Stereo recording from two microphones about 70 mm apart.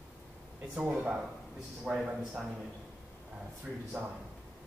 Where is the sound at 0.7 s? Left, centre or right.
Centre.